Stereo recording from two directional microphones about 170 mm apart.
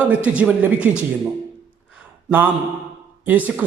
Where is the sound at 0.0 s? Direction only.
10° right (ahead or behind).